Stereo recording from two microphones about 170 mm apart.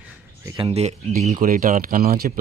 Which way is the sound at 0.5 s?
35° right (ahead or behind).